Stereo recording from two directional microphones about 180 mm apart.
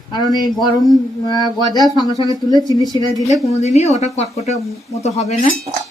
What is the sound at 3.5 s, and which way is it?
Speech, 35° left (ahead or behind).